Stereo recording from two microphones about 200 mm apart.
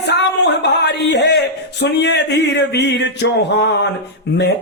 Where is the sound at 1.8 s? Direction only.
60° left (ahead or behind).